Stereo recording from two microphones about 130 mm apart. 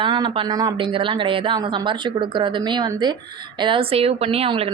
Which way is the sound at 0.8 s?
40° right (ahead or behind).